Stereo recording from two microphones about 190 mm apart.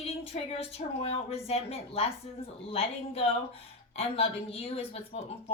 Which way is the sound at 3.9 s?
30° left (ahead or behind).